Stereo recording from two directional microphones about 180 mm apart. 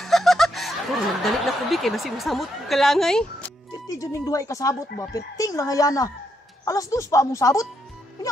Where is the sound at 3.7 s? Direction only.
20° left (ahead or behind).